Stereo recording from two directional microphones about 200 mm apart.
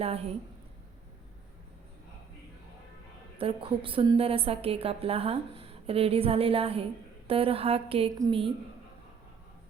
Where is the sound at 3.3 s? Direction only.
25° right (ahead or behind).